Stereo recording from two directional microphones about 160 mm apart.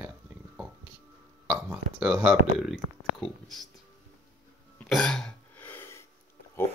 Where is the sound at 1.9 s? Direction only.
Centre (ahead or behind).